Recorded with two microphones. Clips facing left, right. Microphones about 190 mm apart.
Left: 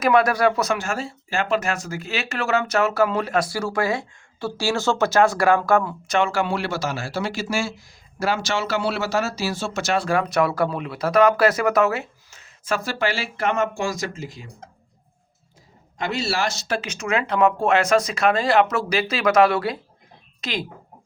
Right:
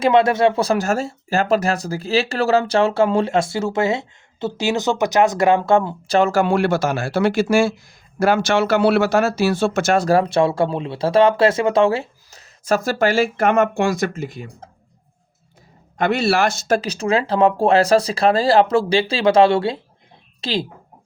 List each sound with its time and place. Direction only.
0.0 s speech: 25° right (ahead or behind); by 14.4 s 60° right (ahead or behind)
16.0 s speech: 60° right (ahead or behind); by 20.7 s 30° right (ahead or behind)